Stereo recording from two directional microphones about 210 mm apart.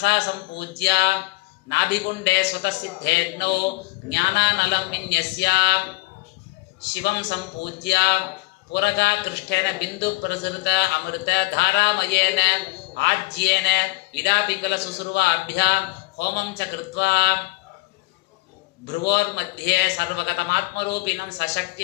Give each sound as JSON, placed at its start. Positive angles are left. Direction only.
{"t": 0.0, "sound": "a man's voice", "side_deg": 55}
{"t": 6.9, "sound": "a man's voice", "side_deg": 55}
{"t": 18.9, "sound": "a man's voice", "side_deg": 50}